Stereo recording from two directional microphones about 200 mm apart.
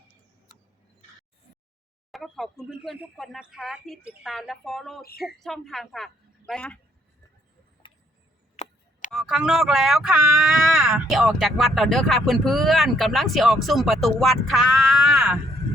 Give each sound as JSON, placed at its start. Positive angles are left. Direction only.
{"t": 2.1, "sound": "speech", "side_deg": 0}
{"t": 8.6, "sound": "chop", "side_deg": 35}
{"t": 9.1, "sound": "speech", "side_deg": 0}